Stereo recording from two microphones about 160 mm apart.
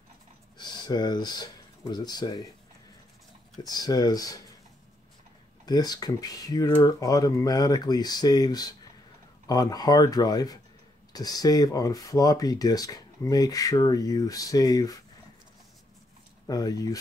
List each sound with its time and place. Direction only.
0.6 s speech: 25° left (ahead or behind)
3.6 s speech: 25° left (ahead or behind)
5.7 s speech: 25° left (ahead or behind)
16.4 s speech: 25° left (ahead or behind)